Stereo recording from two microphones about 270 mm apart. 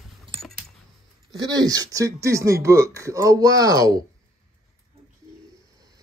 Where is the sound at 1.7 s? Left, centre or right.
Centre.